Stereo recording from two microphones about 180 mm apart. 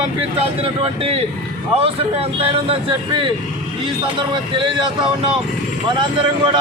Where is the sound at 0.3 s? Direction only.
30° right (ahead or behind).